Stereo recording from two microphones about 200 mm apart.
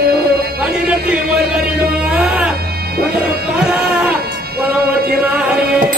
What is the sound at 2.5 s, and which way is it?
Music, 50° right (ahead or behind).